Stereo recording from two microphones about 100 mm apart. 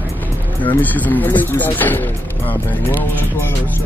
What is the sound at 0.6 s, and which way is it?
Speech, 15° left (ahead or behind).